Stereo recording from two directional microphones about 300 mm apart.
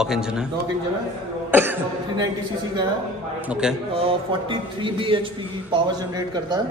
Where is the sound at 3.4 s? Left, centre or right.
Centre.